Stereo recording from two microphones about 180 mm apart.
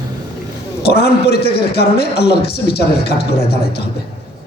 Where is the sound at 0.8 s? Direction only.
65° left (ahead or behind).